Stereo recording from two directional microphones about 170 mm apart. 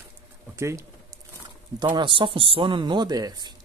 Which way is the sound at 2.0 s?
30° right (ahead or behind).